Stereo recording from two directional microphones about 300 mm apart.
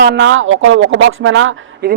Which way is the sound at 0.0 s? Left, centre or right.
Right.